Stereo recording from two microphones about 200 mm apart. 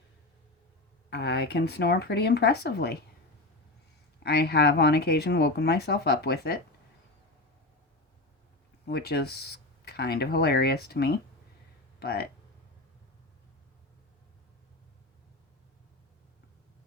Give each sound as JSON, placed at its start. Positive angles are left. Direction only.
{"t": 1.1, "sound": "speech", "side_deg": 55}
{"t": 4.2, "sound": "speech", "side_deg": 55}
{"t": 8.9, "sound": "speech", "side_deg": 50}